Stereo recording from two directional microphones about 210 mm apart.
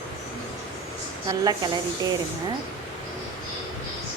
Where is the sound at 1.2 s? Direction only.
20° right (ahead or behind).